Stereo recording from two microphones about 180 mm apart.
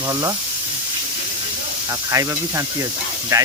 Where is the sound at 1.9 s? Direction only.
20° right (ahead or behind).